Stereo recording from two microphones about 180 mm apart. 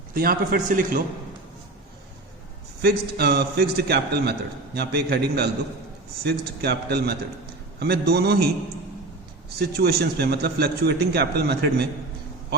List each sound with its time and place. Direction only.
0.1 s a man's voice: 55° right (ahead or behind)
2.8 s a man's voice: 65° right (ahead or behind)
9.6 s a man's voice: 60° right (ahead or behind)